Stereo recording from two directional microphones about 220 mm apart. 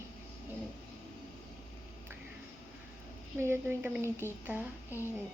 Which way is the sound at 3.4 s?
10° right (ahead or behind).